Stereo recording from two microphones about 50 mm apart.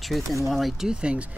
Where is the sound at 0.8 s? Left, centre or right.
Centre.